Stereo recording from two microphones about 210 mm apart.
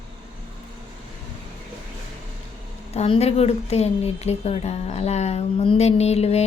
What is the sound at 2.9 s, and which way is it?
A woman's voice, 30° left (ahead or behind).